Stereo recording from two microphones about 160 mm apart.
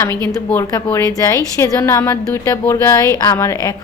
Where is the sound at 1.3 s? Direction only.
20° left (ahead or behind).